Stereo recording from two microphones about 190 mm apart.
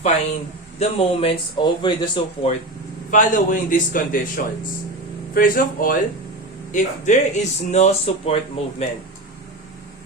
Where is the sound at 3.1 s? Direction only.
45° left (ahead or behind).